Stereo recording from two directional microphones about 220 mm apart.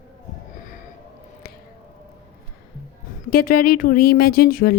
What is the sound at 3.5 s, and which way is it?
Speech, 90° left.